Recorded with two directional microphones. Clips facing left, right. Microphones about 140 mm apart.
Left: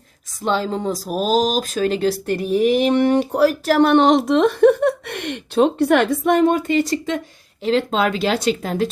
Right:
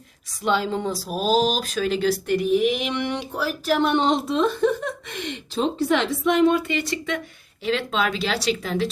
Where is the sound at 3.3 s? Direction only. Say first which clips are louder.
Left 4 dB; 70° left (ahead or behind).